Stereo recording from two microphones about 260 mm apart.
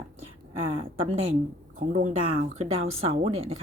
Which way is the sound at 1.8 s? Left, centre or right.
Right.